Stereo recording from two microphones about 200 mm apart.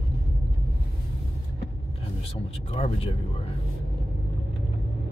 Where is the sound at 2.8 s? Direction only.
30° left (ahead or behind).